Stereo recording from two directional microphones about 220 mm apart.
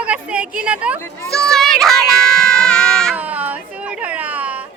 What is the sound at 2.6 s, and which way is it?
Baby cry, 5° left (ahead or behind).